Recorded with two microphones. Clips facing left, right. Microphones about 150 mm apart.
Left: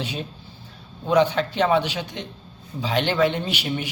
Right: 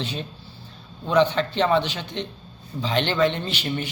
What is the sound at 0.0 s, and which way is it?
A man's voice, 10° left (ahead or behind).